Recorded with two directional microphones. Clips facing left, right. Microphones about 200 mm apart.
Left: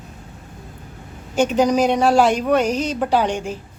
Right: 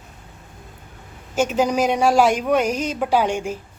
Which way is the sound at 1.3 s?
5° right (ahead or behind).